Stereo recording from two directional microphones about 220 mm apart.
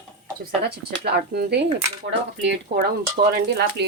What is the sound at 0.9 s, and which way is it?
Speech, 45° right (ahead or behind).